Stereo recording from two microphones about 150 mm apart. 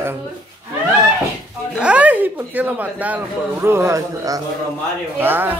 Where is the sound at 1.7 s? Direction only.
10° right (ahead or behind).